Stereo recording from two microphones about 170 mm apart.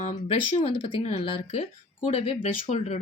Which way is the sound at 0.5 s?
30° left (ahead or behind).